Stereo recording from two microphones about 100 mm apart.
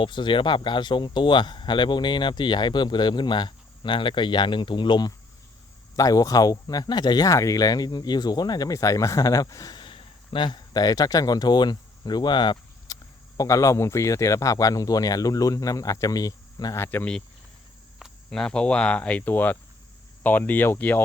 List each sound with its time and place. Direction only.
0.0 s speech: 55° left (ahead or behind)
6.0 s speech: 35° left (ahead or behind)
7.3 s speech: 30° left (ahead or behind)
9.8 s speech: 60° left (ahead or behind); by 16.7 s 40° left (ahead or behind)
16.7 s speech: 20° left (ahead or behind)
18.3 s speech: 10° left (ahead or behind)